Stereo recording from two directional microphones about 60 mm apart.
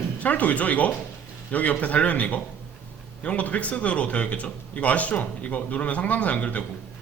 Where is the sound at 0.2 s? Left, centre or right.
Left.